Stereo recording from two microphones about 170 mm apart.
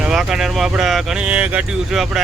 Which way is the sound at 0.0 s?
5° right (ahead or behind).